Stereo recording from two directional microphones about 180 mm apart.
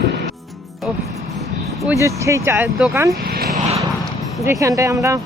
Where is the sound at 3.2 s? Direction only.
55° right (ahead or behind).